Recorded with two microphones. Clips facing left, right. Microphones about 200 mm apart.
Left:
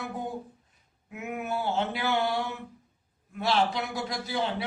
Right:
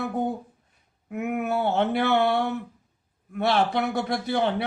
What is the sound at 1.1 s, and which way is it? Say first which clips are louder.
A man's voice: right 7 dB; 60° right (ahead or behind).